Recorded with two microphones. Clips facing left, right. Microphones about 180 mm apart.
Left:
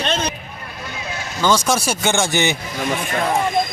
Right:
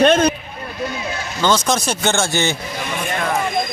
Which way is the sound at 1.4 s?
10° left (ahead or behind).